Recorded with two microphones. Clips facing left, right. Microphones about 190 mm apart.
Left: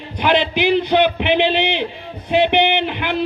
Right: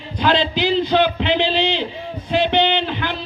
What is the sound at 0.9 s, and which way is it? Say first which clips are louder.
Speech: left 2 dB; 15° left (ahead or behind).